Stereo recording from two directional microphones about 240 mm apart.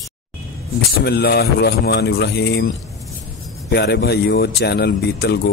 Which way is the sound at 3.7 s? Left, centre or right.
Left.